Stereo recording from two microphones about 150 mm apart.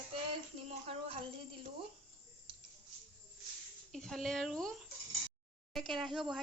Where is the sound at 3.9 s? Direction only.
Centre (ahead or behind).